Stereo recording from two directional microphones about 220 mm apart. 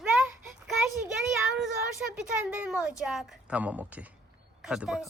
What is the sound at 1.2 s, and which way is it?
Child singing, centre (ahead or behind).